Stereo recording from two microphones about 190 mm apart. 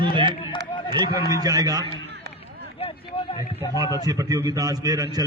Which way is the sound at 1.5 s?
20° right (ahead or behind).